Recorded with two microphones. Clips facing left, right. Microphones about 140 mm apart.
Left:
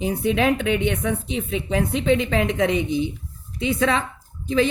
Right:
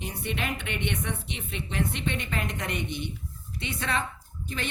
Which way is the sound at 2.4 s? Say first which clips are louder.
Left 13 dB; 90° left.